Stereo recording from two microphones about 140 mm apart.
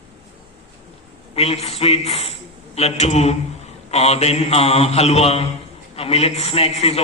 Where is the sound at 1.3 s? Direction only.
45° left (ahead or behind).